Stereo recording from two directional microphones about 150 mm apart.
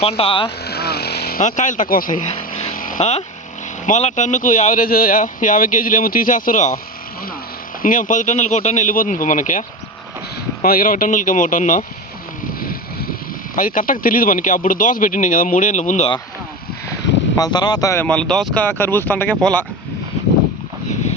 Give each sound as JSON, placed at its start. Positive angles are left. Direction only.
{"t": 0.0, "sound": "speech", "side_deg": 40}
{"t": 0.7, "sound": "vehicle", "side_deg": 90}
{"t": 1.5, "sound": "speech", "side_deg": 55}
{"t": 2.3, "sound": "a sound", "side_deg": 40}
{"t": 2.7, "sound": "a sound", "side_deg": 65}
{"t": 3.0, "sound": "speech", "side_deg": 45}
{"t": 7.8, "sound": "speech", "side_deg": 65}
{"t": 10.6, "sound": "speech", "side_deg": 70}
{"t": 13.6, "sound": "speech", "side_deg": 65}
{"t": 17.3, "sound": "speech", "side_deg": 25}
{"t": 18.0, "sound": "speech", "side_deg": 5}
{"t": 18.6, "sound": "speech", "side_deg": 15}